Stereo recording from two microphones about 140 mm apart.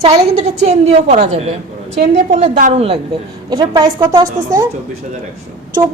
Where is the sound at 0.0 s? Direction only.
50° right (ahead or behind).